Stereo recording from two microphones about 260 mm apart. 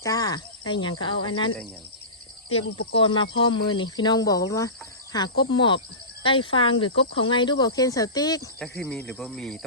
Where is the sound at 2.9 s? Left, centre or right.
Centre.